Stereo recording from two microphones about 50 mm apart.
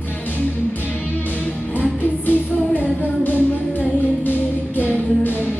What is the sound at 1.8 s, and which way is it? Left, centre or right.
Music, left.